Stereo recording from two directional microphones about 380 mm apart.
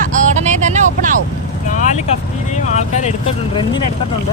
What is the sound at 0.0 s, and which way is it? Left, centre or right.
Vehicle, centre.